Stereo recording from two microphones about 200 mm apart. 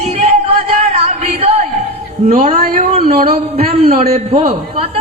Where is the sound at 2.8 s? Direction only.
30° right (ahead or behind).